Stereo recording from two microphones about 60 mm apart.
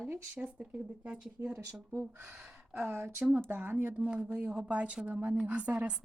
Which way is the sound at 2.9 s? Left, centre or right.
Right.